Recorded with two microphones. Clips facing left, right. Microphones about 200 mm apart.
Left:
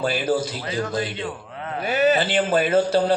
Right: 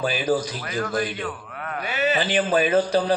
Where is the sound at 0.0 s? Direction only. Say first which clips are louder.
Left 1 dB; 15° right (ahead or behind).